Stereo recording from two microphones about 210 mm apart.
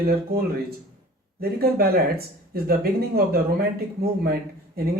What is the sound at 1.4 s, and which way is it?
Speech, 45° right (ahead or behind).